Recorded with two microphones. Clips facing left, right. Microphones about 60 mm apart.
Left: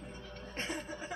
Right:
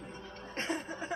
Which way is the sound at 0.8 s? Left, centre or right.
Centre.